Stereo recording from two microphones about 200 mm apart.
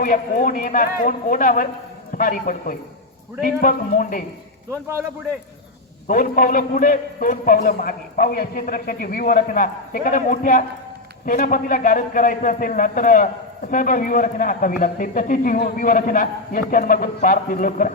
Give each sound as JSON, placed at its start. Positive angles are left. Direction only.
{"t": 0.0, "sound": "a man's voice", "side_deg": 45}
{"t": 4.7, "sound": "a man's voice", "side_deg": -15}
{"t": 6.1, "sound": "a man's voice", "side_deg": 40}